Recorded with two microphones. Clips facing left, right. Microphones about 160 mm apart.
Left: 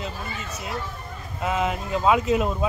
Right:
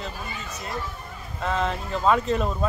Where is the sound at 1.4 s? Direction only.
5° left (ahead or behind).